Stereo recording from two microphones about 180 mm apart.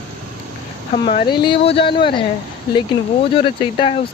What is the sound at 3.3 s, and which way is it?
Speech, 30° left (ahead or behind).